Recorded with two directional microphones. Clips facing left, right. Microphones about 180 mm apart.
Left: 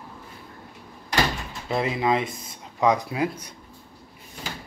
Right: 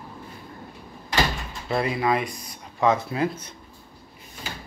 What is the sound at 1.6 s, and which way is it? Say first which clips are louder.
Speech: even; 20° left (ahead or behind).